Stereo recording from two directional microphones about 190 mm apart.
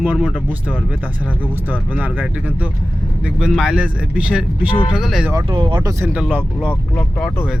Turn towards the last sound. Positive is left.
turn(degrees=10)  # may be behind; listen again after turning